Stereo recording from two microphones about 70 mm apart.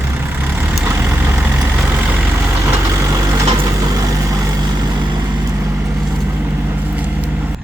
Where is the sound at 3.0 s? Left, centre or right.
Right.